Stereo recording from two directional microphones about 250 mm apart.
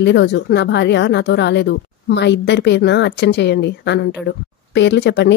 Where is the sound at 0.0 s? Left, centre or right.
Left.